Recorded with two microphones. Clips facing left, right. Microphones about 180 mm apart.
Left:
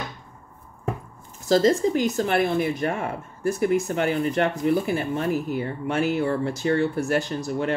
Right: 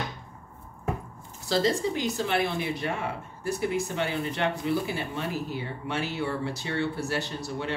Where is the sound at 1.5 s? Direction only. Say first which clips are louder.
Left 7 dB; 45° left (ahead or behind).